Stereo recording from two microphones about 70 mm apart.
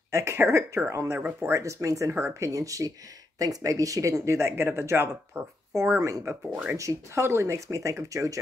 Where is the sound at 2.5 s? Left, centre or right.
Right.